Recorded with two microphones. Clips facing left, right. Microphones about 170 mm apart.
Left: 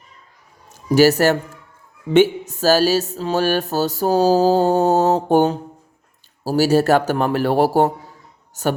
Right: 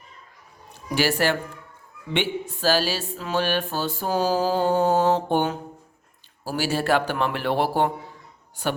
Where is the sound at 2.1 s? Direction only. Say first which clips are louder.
Left 12 dB; 40° left (ahead or behind).